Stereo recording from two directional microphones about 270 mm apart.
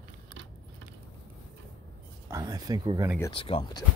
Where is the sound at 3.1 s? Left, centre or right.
Centre.